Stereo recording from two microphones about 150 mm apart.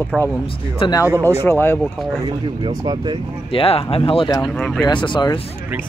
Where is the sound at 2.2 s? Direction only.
25° right (ahead or behind).